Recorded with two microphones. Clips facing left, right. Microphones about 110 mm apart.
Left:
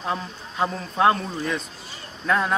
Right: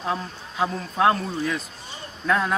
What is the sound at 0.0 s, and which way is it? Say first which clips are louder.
Speech: even; centre (ahead or behind).